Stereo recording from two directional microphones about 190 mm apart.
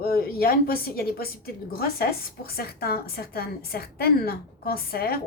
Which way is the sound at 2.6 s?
55° left (ahead or behind).